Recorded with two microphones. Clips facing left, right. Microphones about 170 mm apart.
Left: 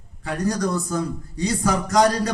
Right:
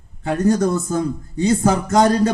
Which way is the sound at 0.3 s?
25° right (ahead or behind).